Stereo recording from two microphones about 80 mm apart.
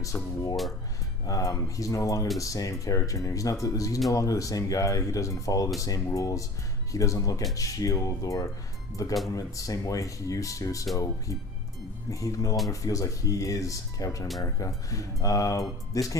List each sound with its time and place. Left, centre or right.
0.0 s speech: left